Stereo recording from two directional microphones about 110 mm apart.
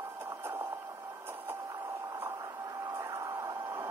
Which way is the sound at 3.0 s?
30° right (ahead or behind).